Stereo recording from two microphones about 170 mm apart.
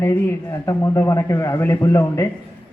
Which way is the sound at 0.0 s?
15° left (ahead or behind).